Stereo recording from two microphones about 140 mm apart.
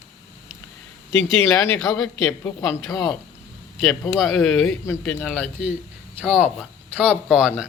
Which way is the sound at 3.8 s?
Centre (ahead or behind).